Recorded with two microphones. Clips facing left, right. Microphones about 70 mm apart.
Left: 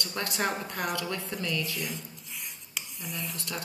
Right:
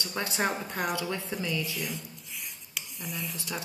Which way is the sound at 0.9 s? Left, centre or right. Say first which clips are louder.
Right 1 dB; centre.